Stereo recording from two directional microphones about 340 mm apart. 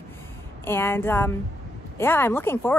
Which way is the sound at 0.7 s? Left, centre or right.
Centre.